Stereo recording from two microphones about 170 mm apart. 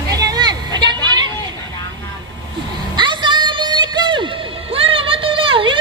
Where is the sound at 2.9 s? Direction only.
25° right (ahead or behind).